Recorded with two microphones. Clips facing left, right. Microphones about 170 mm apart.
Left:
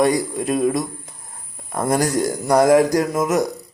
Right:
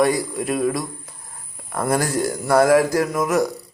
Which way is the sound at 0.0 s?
20° left (ahead or behind).